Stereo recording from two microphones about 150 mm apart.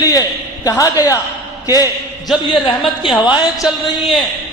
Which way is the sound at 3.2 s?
30° left (ahead or behind).